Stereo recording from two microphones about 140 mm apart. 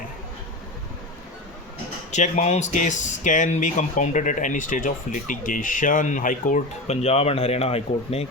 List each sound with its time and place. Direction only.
2.1 s speech: 60° left (ahead or behind)
6.8 s speech: 50° left (ahead or behind)